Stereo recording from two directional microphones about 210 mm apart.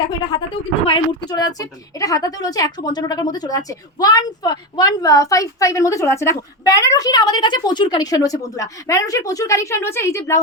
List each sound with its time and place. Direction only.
0.1 s a woman's voice: 20° left (ahead or behind)